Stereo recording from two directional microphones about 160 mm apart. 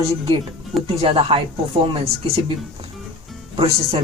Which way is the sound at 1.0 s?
35° right (ahead or behind).